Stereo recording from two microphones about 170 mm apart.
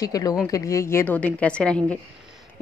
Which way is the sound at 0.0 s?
20° left (ahead or behind).